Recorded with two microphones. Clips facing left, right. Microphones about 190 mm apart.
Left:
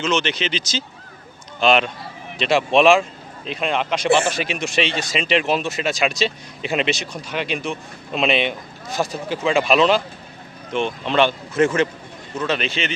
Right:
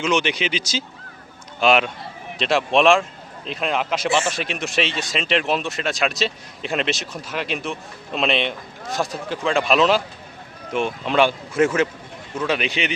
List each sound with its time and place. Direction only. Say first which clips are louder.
0.0 s speech: right 1 dB; 15° right (ahead or behind)